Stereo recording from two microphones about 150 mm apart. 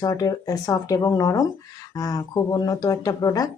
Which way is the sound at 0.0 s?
25° left (ahead or behind).